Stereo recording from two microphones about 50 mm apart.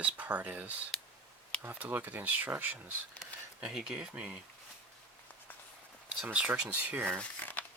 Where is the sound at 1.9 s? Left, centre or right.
Right.